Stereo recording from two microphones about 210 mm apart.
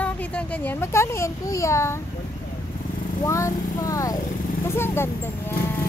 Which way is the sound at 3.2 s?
15° left (ahead or behind).